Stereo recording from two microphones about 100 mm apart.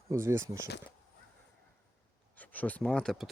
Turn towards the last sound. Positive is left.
turn(degrees=5)  # may be behind; listen again after turning